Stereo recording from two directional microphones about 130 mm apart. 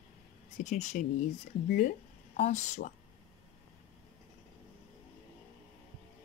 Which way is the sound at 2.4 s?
65° left (ahead or behind).